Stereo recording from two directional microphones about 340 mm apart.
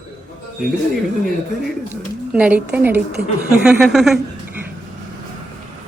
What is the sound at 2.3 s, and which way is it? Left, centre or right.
A woman's voice, centre.